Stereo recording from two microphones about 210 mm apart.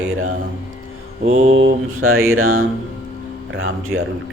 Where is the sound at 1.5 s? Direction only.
70° right (ahead or behind).